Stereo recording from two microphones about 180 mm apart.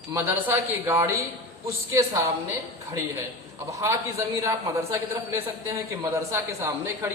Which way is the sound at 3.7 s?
15° right (ahead or behind).